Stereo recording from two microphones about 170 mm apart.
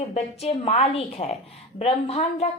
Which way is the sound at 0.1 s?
40° left (ahead or behind).